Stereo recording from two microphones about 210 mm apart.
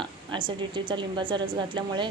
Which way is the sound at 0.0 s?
25° right (ahead or behind).